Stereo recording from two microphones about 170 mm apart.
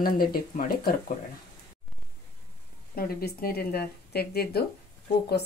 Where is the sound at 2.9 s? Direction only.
60° left (ahead or behind).